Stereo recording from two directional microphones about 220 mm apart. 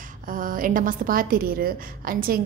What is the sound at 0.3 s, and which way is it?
A woman's voice, 40° right (ahead or behind).